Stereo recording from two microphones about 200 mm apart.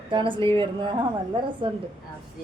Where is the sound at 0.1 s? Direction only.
25° right (ahead or behind).